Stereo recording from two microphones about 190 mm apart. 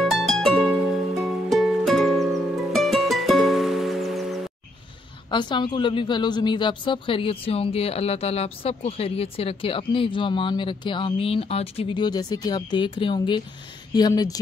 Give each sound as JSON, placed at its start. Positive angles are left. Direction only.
{"t": 0.0, "sound": "music", "side_deg": 0}
{"t": 5.3, "sound": "a woman's voice", "side_deg": 25}